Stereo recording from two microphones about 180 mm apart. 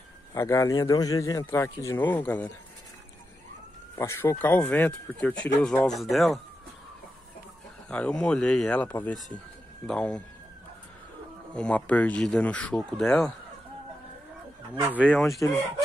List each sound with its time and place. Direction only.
0.3 s speech: 15° left (ahead or behind)
3.9 s speech: 15° left (ahead or behind)
7.9 s speech: 5° left (ahead or behind)
11.5 s speech: 5° left (ahead or behind)
14.8 s speech: 10° right (ahead or behind)
15.4 s speech: 15° left (ahead or behind)